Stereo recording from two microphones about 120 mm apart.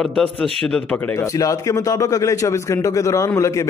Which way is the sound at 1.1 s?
30° left (ahead or behind).